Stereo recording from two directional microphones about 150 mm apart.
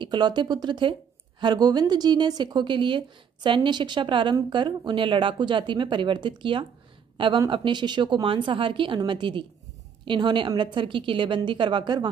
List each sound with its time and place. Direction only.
0.0 s a woman's voice: 30° right (ahead or behind)